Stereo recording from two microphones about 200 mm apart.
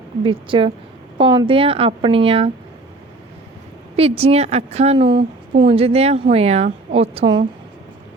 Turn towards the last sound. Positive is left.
turn(degrees=-25)  # may be behind; listen again after turning